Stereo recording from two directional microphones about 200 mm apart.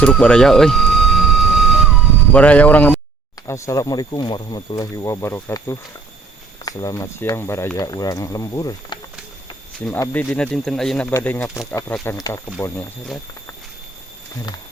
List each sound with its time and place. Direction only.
0.0 s vehicle: 5° left (ahead or behind)
2.3 s speech: 5° left (ahead or behind)